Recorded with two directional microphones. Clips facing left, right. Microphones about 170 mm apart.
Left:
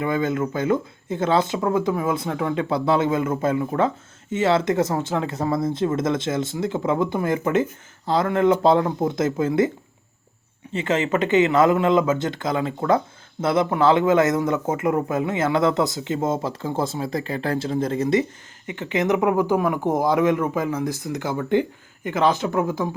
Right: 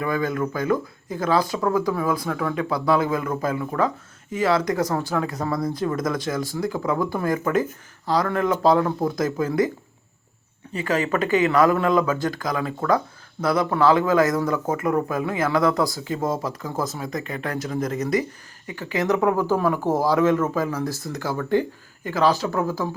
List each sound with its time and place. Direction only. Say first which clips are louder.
0.0 s speech: left 1 dB; 25° left (ahead or behind)